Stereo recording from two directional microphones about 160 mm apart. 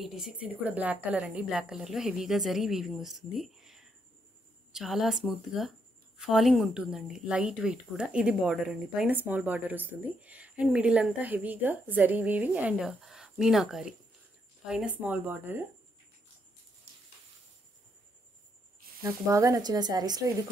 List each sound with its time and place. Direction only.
0.0 s a woman's voice: 5° right (ahead or behind)
19.0 s speech: 20° right (ahead or behind)